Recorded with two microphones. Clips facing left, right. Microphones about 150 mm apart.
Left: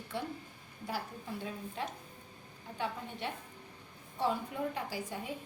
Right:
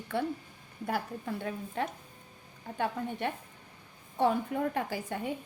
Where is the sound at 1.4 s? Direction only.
60° right (ahead or behind).